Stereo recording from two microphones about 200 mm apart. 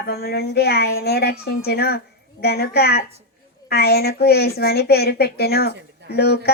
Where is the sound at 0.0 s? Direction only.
50° left (ahead or behind).